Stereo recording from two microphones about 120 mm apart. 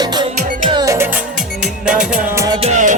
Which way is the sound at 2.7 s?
90° right.